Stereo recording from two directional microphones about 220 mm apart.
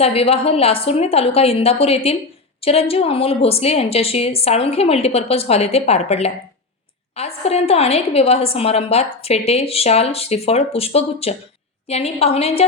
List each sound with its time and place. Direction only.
0.0 s a woman's voice: 25° left (ahead or behind)